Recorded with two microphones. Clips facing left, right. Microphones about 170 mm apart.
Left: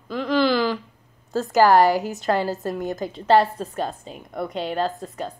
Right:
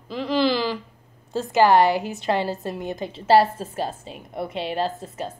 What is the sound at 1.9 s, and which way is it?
Speech, 40° left (ahead or behind).